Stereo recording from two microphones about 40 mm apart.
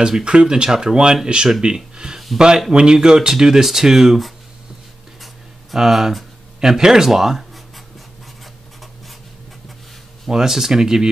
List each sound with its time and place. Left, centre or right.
0.2 s speech: right
2.0 s a sound: centre
2.3 s speech: centre
5.8 s speech: centre
10.3 s speech: centre